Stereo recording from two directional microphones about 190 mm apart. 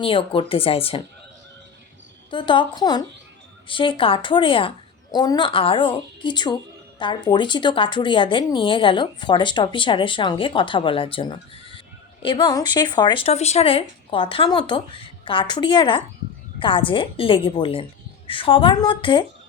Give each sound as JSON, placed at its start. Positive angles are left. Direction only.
{"t": 0.0, "sound": "a woman's voice", "side_deg": 30}
{"t": 2.3, "sound": "a woman's voice", "side_deg": 25}